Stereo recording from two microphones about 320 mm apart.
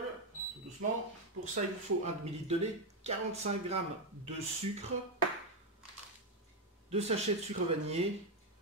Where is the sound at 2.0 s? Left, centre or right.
Centre.